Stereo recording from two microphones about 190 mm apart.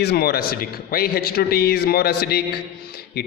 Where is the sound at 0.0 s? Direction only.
55° left (ahead or behind).